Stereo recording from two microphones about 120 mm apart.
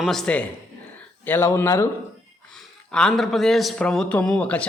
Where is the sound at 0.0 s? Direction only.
5° left (ahead or behind).